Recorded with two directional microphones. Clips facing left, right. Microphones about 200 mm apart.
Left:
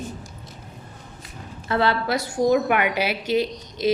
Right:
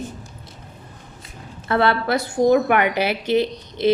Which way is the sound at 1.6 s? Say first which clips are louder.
Right 3 dB; 60° right (ahead or behind).